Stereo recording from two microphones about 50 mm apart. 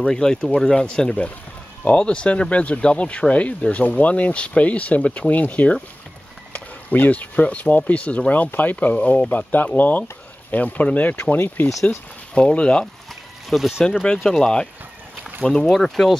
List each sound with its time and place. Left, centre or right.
0.0 s speech: centre
1.9 s speech: left
11.3 s speech: left
12.4 s speech: left
13.5 s speech: centre
14.0 s speech: centre